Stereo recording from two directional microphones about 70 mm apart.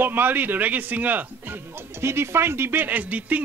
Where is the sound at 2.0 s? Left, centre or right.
Right.